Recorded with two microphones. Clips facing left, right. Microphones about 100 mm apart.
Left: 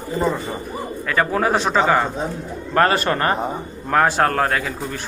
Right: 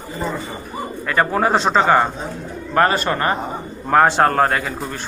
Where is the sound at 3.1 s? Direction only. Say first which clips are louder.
Even; 20° right (ahead or behind).